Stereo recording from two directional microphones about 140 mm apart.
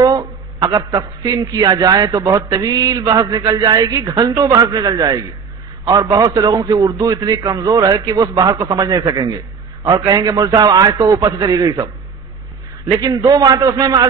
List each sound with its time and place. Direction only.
0.0 s a man's voice: 25° right (ahead or behind)
13.0 s a man's voice: 25° right (ahead or behind)